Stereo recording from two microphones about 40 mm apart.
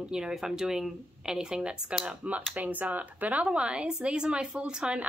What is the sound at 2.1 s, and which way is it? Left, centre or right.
Speech, right.